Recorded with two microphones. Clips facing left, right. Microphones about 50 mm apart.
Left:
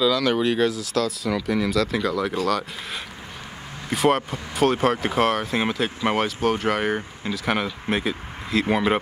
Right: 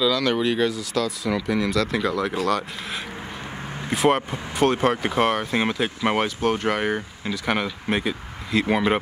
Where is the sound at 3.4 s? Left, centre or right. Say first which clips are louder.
Right 4 dB; right.